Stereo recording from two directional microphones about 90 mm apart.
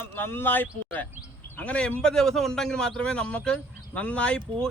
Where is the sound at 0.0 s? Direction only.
25° left (ahead or behind).